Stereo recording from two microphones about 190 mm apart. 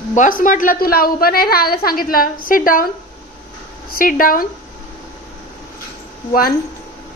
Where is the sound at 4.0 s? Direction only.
45° left (ahead or behind).